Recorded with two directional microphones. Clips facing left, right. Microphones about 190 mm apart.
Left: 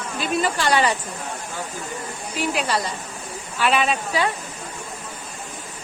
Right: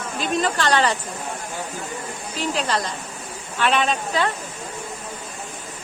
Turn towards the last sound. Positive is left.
turn(degrees=5)  # may be behind; listen again after turning